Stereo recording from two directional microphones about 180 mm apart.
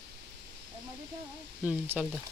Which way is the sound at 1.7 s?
10° right (ahead or behind).